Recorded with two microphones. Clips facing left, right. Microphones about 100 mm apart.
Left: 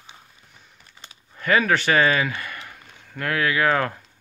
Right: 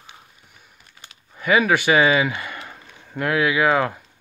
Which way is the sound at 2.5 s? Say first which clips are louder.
Right 3 dB; 30° right (ahead or behind).